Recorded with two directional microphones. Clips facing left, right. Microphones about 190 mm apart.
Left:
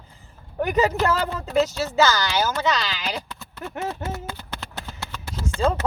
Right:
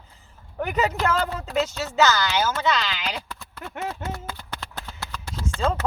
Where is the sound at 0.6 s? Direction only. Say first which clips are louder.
Left 3 dB; 35° left (ahead or behind).